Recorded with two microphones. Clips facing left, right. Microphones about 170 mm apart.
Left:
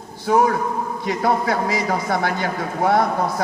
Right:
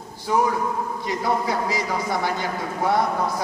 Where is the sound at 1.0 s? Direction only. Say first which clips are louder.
Left 4 dB; 60° left (ahead or behind).